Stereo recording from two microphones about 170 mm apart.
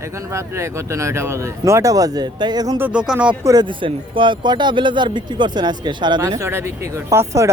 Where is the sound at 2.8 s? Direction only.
10° right (ahead or behind).